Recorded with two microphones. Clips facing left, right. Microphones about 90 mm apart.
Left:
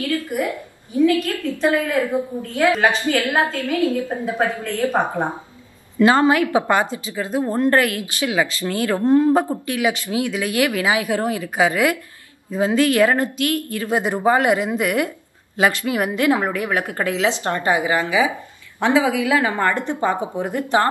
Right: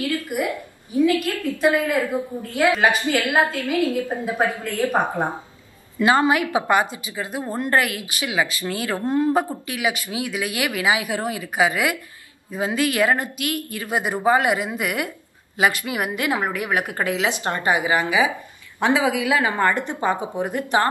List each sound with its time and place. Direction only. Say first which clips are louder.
0.1 s speech: left 2 dB; 10° right (ahead or behind)
4.8 s a woman's voice: left 1 dB; 15° left (ahead or behind)
5.9 s a woman's voice: left 3 dB; 15° right (ahead or behind)